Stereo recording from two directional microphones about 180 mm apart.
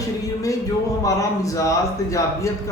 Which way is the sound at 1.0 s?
20° left (ahead or behind).